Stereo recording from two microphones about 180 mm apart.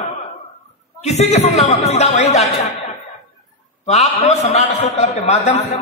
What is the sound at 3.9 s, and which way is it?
Speech, 40° left (ahead or behind).